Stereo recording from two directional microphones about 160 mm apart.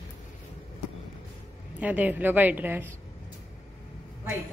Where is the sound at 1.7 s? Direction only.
10° right (ahead or behind).